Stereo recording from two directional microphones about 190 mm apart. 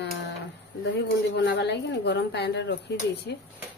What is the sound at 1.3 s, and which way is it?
Speech, 65° left (ahead or behind).